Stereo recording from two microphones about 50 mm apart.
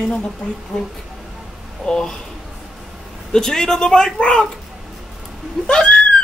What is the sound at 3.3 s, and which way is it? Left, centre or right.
Speech, centre.